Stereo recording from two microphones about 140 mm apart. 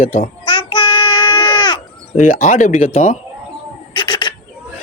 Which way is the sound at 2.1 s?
65° left (ahead or behind).